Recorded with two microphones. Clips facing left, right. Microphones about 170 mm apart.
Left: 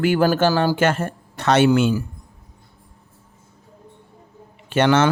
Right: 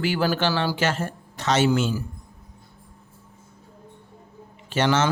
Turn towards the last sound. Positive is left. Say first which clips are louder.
# left 5 dB
turn(degrees=60)  # may be behind; listen again after turning